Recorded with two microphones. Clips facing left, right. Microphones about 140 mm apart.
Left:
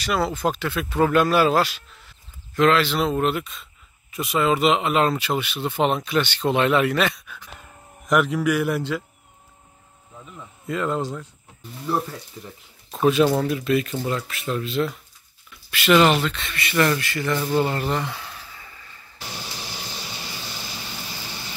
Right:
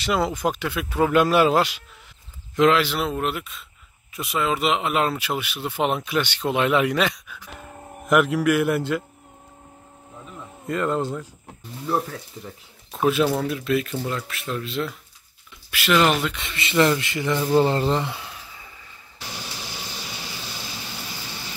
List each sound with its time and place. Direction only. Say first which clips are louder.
0.0 s speech: even; 20° right (ahead or behind); by 9.0 s centre (ahead or behind)
10.7 s speech: right 1 dB; centre (ahead or behind)
16.2 s speech: left 1 dB; 15° right (ahead or behind)
17.6 s a sound: right 6 dB; 30° right (ahead or behind); by 18.9 s 10° right (ahead or behind)